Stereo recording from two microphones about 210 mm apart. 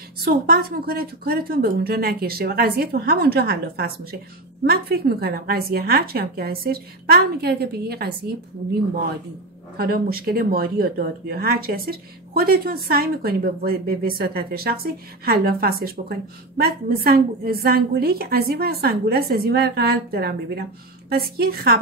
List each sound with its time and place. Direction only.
0.2 s a woman's voice: 45° right (ahead or behind)
9.8 s a woman's voice: 45° right (ahead or behind)